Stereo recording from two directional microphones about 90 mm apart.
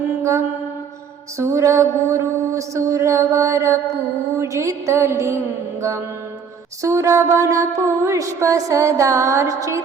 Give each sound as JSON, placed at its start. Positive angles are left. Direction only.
{"t": 0.2, "sound": "mantra", "side_deg": -35}
{"t": 6.8, "sound": "mantra", "side_deg": -35}